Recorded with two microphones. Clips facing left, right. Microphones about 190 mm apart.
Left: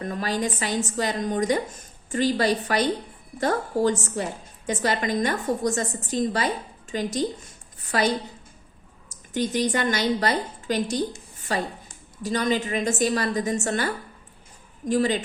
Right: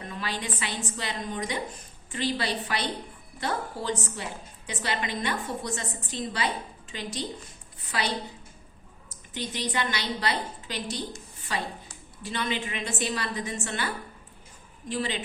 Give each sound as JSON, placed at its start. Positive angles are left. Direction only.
{"t": 0.0, "sound": "a woman's voice", "side_deg": 45}